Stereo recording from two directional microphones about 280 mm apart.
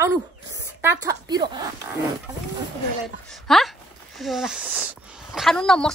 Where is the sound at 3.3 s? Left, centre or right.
Centre.